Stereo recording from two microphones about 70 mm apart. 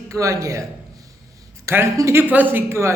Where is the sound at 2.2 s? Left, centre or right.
Right.